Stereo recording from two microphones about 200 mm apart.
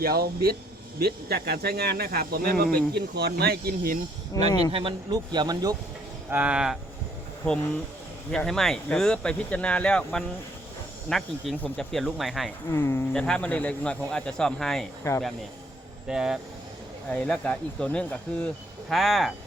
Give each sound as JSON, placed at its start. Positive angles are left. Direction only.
{"t": 0.0, "sound": "speech", "side_deg": -50}
{"t": 4.3, "sound": "speech", "side_deg": 15}
{"t": 4.7, "sound": "speech", "side_deg": -25}
{"t": 6.3, "sound": "speech", "side_deg": -5}
{"t": 8.3, "sound": "speech", "side_deg": 0}
{"t": 12.7, "sound": "speech", "side_deg": 10}
{"t": 15.1, "sound": "speech", "side_deg": 15}
{"t": 16.0, "sound": "speech", "side_deg": -5}